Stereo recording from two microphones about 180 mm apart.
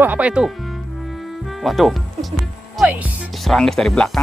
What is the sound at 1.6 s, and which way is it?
Speech, centre (ahead or behind).